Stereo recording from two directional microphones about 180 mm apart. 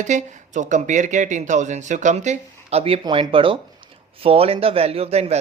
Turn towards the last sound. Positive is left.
turn(degrees=-35)  # may be behind; listen again after turning